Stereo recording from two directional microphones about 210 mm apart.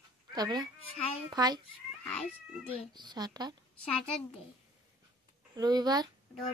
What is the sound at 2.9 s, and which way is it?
Speech, 20° right (ahead or behind).